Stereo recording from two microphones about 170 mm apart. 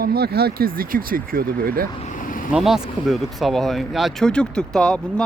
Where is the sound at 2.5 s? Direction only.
5° right (ahead or behind).